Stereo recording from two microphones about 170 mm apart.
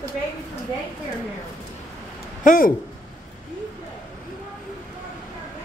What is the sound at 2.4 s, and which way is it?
Speech, 55° left (ahead or behind).